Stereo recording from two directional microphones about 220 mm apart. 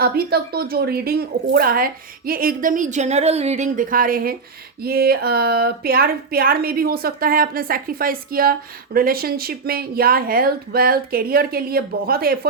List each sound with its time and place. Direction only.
0.0 s a woman's voice: 45° right (ahead or behind)